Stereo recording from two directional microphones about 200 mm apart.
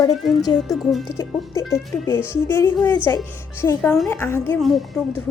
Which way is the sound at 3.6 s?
10° left (ahead or behind).